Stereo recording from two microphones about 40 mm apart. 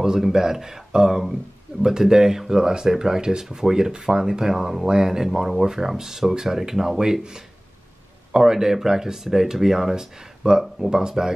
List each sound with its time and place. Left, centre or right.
0.0 s speech: centre